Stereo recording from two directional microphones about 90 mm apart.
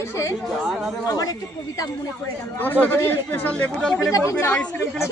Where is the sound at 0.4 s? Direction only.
Centre (ahead or behind).